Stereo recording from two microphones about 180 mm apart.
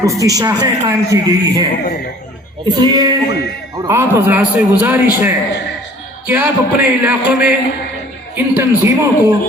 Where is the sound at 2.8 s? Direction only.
25° right (ahead or behind).